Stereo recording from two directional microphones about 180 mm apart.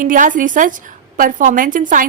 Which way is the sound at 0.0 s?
45° right (ahead or behind).